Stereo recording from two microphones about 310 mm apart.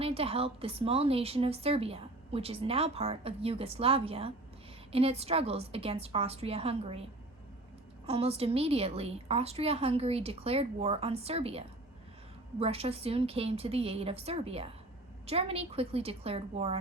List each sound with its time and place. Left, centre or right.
0.0 s a woman's voice: centre
8.0 s a woman's voice: centre